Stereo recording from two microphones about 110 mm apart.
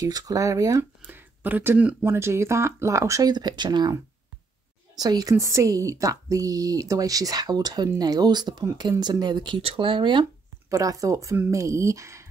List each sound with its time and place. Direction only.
0.0 s speech: 35° right (ahead or behind)
1.0 s speech: 15° right (ahead or behind); by 3.9 s 40° right (ahead or behind)
4.9 s speech: 35° right (ahead or behind)
9.6 s speech: 55° right (ahead or behind)
10.7 s speech: 30° right (ahead or behind)